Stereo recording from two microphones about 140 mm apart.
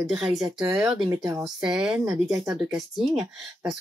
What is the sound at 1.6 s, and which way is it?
Speech, 5° right (ahead or behind).